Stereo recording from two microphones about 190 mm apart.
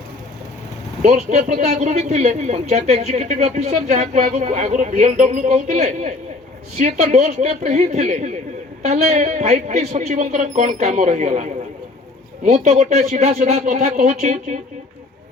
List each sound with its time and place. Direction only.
1.0 s a man's voice: 40° right (ahead or behind)